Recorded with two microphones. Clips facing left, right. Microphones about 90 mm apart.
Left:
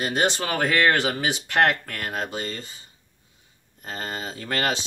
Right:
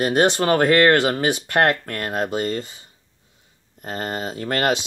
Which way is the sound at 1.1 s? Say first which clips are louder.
Right 4 dB; 20° right (ahead or behind).